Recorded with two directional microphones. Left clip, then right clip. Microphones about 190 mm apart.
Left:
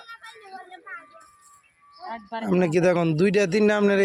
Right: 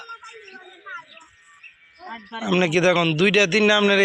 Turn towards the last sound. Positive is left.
turn(degrees=10)  # may be behind; listen again after turning